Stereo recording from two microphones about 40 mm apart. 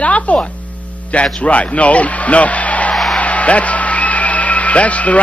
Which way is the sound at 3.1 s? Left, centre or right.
Left.